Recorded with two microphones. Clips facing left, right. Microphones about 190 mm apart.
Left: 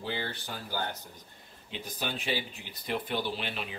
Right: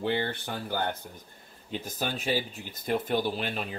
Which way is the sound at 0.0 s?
60° right (ahead or behind).